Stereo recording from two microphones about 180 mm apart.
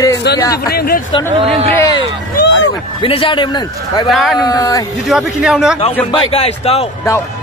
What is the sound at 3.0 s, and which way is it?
A man's voice, 30° left (ahead or behind).